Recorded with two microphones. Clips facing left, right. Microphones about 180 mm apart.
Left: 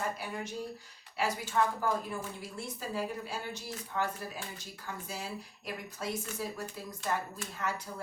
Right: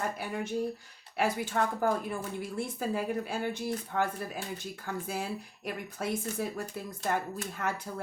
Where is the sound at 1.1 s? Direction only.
55° right (ahead or behind).